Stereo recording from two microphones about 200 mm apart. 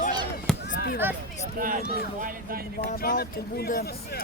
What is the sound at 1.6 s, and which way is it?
Speech, 40° right (ahead or behind).